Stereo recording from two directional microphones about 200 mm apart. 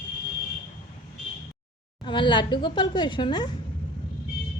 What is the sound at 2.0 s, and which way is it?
Speech, 25° left (ahead or behind).